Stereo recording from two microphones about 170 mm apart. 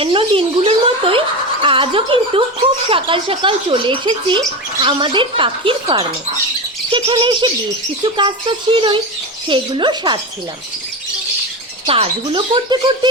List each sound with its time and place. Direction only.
0.0 s speech: 30° right (ahead or behind)
11.9 s speech: 30° right (ahead or behind)